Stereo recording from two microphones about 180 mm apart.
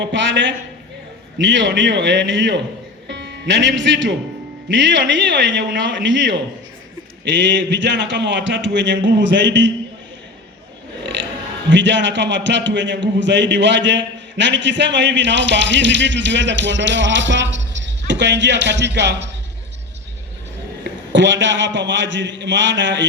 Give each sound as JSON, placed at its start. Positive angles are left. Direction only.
{"t": 0.0, "sound": "a man's voice", "side_deg": -90}
{"t": 3.1, "sound": "a man's voice", "side_deg": -75}
{"t": 11.0, "sound": "a sound", "side_deg": -90}
{"t": 11.7, "sound": "a man's voice", "side_deg": -85}
{"t": 20.8, "sound": "a man's voice", "side_deg": -90}